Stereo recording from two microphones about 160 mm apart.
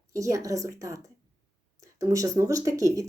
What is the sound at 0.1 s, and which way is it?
Speech, 20° right (ahead or behind).